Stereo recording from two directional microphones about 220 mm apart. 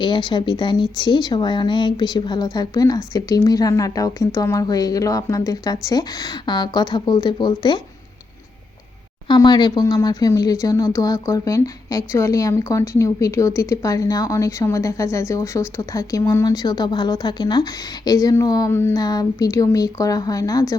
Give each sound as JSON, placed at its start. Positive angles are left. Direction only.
{"t": 0.0, "sound": "speech", "side_deg": 20}
{"t": 9.2, "sound": "speech", "side_deg": 20}